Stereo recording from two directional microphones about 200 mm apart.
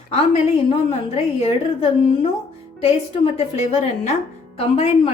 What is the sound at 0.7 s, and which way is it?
A woman's voice, 30° left (ahead or behind).